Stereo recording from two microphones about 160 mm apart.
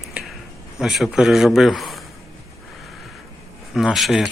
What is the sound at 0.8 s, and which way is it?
Speech, 5° right (ahead or behind).